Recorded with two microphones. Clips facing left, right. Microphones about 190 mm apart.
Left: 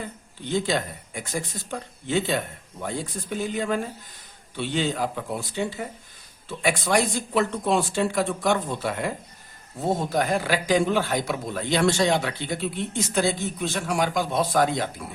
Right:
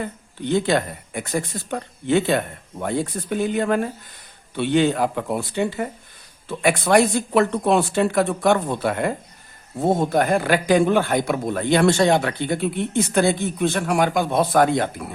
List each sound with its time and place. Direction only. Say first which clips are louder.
0.0 s speech: right 7 dB; 60° right (ahead or behind)